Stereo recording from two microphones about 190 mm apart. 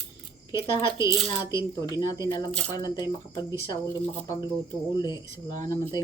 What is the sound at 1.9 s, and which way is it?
Speech, 20° left (ahead or behind).